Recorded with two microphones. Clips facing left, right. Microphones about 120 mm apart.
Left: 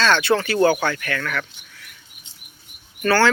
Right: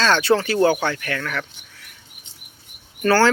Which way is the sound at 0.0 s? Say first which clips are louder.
Right 1 dB; 35° right (ahead or behind).